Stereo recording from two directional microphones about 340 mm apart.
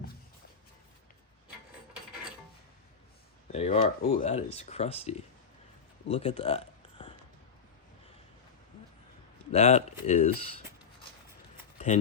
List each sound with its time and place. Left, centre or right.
3.5 s speech: centre
9.5 s speech: centre
10.3 s speech: right